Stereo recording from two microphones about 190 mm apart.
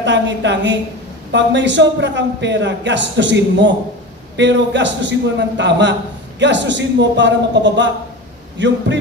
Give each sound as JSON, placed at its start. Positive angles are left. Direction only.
{"t": 0.0, "sound": "a man's voice", "side_deg": -70}